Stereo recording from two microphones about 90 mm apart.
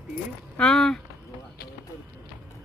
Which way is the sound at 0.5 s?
5° left (ahead or behind).